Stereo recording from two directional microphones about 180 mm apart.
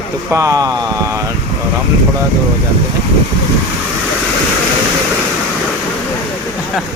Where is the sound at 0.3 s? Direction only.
20° right (ahead or behind).